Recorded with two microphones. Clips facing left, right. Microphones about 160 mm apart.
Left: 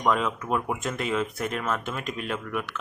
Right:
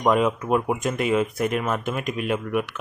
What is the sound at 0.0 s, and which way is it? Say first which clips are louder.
Speech: right 5 dB; 15° right (ahead or behind).